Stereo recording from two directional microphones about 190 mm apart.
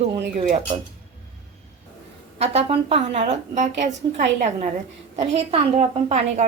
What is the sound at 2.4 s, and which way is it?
A woman's voice, 30° right (ahead or behind).